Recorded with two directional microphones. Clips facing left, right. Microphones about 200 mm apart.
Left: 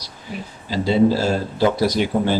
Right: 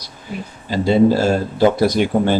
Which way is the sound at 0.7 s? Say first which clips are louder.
Right 3 dB; 50° right (ahead or behind).